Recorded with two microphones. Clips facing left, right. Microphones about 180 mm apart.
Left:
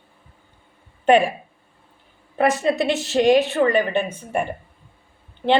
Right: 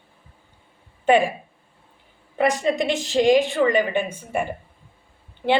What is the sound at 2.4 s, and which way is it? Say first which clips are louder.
A woman's voice: left 1 dB; 15° right (ahead or behind).